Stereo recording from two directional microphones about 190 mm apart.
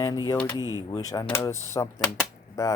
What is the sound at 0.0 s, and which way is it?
Speech, 20° left (ahead or behind).